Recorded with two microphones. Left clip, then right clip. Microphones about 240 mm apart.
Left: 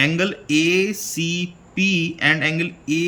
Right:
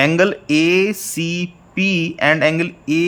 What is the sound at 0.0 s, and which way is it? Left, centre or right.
Speech, centre.